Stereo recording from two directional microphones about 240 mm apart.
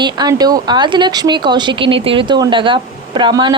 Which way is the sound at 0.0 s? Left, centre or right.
Centre.